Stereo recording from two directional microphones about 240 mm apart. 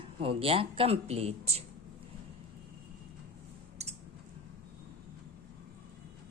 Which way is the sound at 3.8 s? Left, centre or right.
Right.